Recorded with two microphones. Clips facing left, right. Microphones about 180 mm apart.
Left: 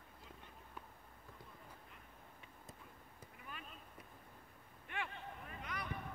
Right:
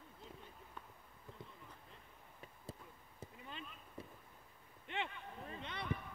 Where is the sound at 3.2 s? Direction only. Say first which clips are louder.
Right 4 dB; 25° right (ahead or behind).